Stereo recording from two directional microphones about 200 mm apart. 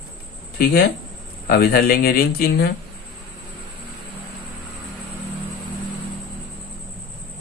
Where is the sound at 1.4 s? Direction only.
50° left (ahead or behind).